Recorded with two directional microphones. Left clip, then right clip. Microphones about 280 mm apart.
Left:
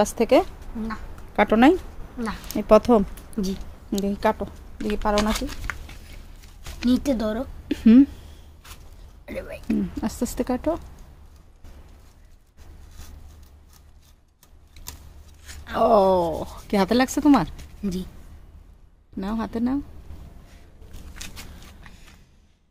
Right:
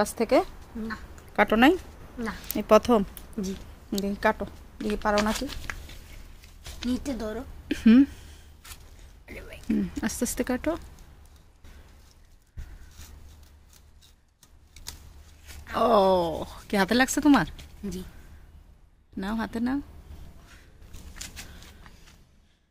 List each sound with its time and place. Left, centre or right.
0.0 s a woman's voice: centre
6.9 s speech: left
7.6 s a woman's voice: centre
9.2 s speech: left
9.9 s speech: centre
15.7 s speech: centre
17.9 s speech: left
19.1 s speech: centre